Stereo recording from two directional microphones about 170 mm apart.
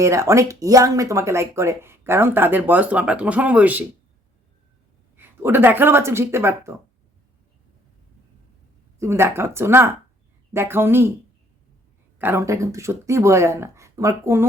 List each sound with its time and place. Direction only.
0.0 s speech: 15° right (ahead or behind)
5.1 s speech: 10° right (ahead or behind)
9.0 s speech: 15° right (ahead or behind)
12.2 s speech: 15° right (ahead or behind)